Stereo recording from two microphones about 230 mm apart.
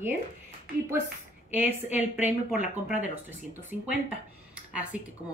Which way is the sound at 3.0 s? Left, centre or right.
Centre.